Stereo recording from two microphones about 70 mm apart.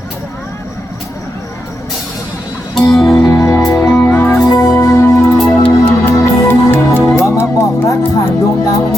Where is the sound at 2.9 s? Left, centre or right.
Centre.